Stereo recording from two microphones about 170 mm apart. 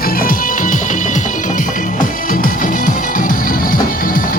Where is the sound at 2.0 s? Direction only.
55° left (ahead or behind).